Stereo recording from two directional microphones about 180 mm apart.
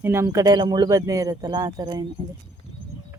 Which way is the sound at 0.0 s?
15° right (ahead or behind).